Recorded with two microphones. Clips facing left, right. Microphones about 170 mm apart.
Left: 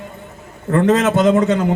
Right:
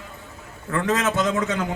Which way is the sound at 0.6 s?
45° left (ahead or behind).